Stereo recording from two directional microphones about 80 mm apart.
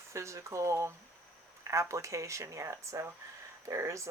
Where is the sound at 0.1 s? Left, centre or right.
Right.